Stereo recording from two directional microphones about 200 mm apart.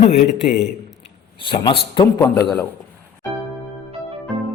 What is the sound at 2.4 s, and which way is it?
Speech, 5° left (ahead or behind).